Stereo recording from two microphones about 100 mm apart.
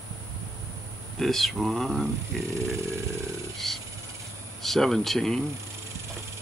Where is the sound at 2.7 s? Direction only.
30° right (ahead or behind).